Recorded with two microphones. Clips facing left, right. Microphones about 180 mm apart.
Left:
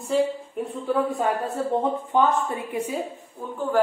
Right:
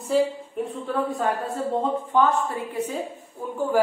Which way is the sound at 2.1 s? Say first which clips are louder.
Even; 20° left (ahead or behind).